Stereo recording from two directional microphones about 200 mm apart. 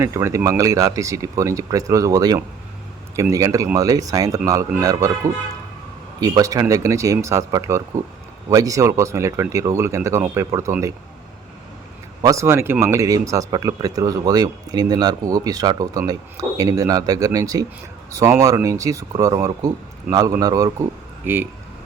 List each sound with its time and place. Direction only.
0.0 s speech: 15° right (ahead or behind)
12.2 s speech: 15° right (ahead or behind)